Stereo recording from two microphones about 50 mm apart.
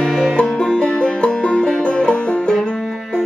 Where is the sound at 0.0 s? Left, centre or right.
Centre.